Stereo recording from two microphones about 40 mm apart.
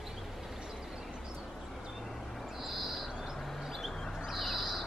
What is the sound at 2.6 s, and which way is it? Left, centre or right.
Bird, centre.